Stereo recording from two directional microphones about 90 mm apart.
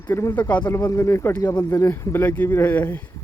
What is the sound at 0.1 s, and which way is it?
Speech, 35° left (ahead or behind).